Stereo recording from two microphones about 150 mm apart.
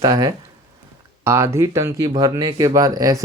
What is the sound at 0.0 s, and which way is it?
Speech, 25° right (ahead or behind).